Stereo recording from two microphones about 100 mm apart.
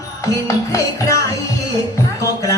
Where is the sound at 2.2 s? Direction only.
30° left (ahead or behind).